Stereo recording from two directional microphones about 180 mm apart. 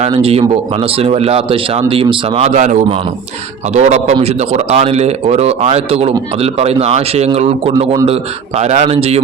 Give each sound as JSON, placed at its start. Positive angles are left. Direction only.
{"t": 0.0, "sound": "speech", "side_deg": -30}